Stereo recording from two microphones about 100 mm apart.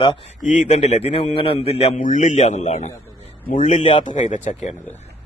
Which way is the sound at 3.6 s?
70° left (ahead or behind).